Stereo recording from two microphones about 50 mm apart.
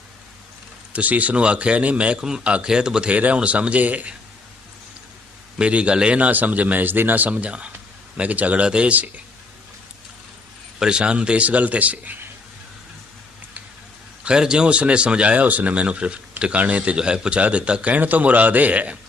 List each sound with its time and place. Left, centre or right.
0.9 s a man's voice: right; by 3.1 s centre
3.1 s a man's voice: right
5.5 s a man's voice: right
6.1 s speech: right
6.8 s a man's voice: right
8.9 s speech: right
10.8 s a man's voice: centre
14.3 s a man's voice: centre